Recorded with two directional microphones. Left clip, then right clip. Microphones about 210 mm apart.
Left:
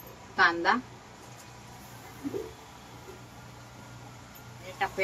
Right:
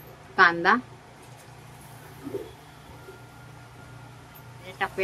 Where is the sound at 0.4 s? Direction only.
25° right (ahead or behind).